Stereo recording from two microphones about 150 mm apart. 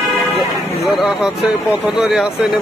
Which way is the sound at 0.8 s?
5° right (ahead or behind).